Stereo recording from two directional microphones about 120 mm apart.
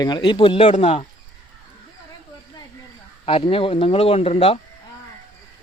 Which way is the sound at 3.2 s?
50° left (ahead or behind).